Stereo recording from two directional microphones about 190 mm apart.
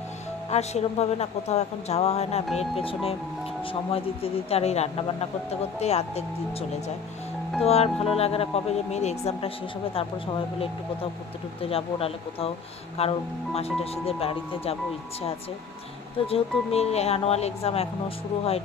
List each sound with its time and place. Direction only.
0.5 s speech: 35° left (ahead or behind)
7.6 s speech: 35° left (ahead or behind)
11.7 s speech: 30° left (ahead or behind)
16.3 s speech: 35° left (ahead or behind)